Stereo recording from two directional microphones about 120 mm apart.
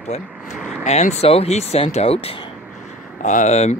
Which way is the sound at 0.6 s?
5° right (ahead or behind).